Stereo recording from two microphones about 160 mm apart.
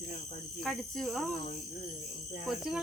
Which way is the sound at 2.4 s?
5° right (ahead or behind).